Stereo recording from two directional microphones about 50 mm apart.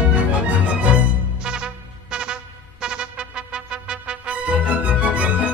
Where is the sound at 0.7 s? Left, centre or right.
Right.